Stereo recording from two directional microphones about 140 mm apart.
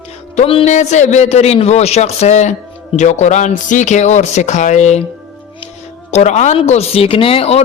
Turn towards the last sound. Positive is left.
turn(degrees=45)  # may be behind; listen again after turning